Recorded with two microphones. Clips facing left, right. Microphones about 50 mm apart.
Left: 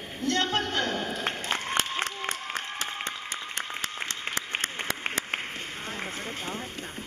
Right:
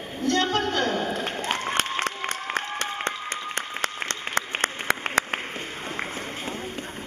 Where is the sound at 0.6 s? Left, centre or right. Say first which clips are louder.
Right 4 dB; right.